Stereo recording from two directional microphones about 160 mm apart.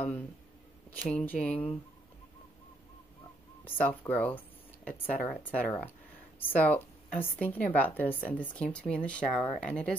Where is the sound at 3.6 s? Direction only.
10° left (ahead or behind).